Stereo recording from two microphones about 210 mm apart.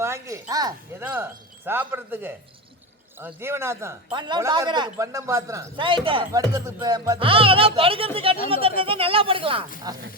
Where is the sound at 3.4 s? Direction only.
10° right (ahead or behind).